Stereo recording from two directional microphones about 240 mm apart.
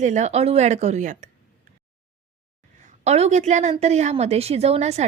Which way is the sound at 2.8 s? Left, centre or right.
Right.